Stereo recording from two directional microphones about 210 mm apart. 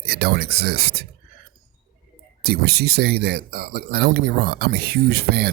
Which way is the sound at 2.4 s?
50° right (ahead or behind).